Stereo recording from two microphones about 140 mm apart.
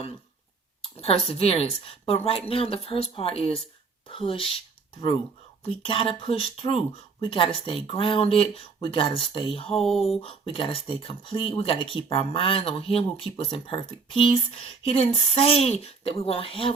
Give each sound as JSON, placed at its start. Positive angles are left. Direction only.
{"t": 0.8, "sound": "a woman's voice", "side_deg": 45}